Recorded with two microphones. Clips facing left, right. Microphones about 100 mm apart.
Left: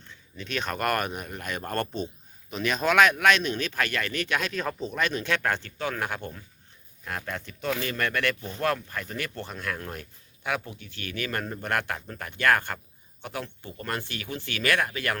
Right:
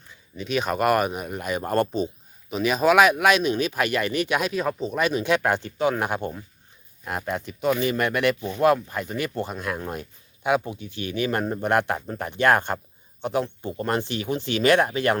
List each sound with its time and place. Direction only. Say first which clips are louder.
0.0 s speech: right 6 dB; 10° right (ahead or behind)